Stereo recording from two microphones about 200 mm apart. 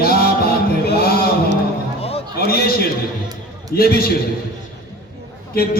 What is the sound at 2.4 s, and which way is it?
Speech, 50° left (ahead or behind).